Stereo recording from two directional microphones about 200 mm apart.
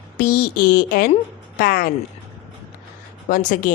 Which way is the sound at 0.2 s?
45° left (ahead or behind).